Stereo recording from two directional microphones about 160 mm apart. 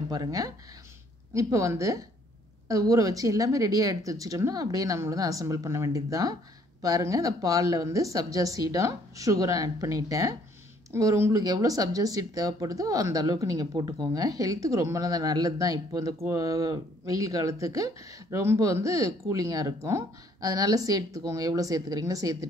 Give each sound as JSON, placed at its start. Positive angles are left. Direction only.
{"t": 0.1, "sound": "speech", "side_deg": -20}